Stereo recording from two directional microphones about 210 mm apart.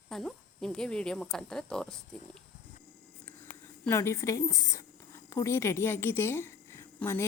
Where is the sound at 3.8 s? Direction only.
10° left (ahead or behind).